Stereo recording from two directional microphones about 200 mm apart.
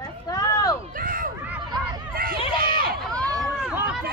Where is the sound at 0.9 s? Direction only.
45° right (ahead or behind).